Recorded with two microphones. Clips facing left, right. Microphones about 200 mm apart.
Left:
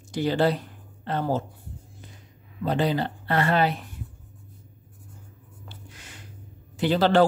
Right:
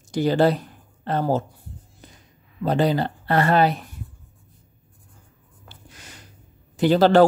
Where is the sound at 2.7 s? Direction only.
40° right (ahead or behind).